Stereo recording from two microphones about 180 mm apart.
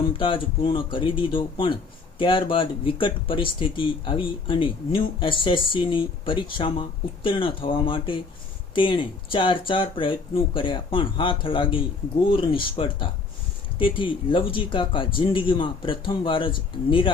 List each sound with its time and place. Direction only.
0.2 s speech: 30° left (ahead or behind)